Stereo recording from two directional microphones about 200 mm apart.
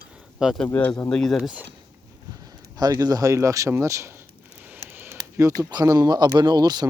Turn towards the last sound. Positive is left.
turn(degrees=-20)  # may be behind; listen again after turning